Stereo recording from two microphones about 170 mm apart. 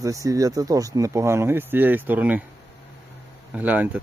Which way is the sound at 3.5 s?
10° right (ahead or behind).